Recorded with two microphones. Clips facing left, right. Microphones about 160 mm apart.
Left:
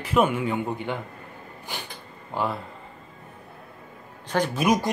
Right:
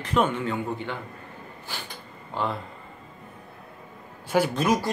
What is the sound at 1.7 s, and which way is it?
Snort, 15° left (ahead or behind).